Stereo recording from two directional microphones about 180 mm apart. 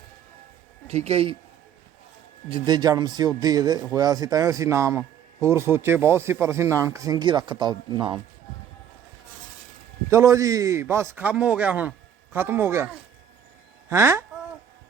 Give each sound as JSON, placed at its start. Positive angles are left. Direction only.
{"t": 0.9, "sound": "speech", "side_deg": -35}
{"t": 2.5, "sound": "a man's voice", "side_deg": -25}
{"t": 10.1, "sound": "a man's voice", "side_deg": -15}
{"t": 13.9, "sound": "a man's voice", "side_deg": -15}